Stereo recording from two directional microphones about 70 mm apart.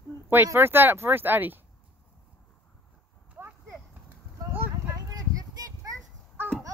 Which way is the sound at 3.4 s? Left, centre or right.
Right.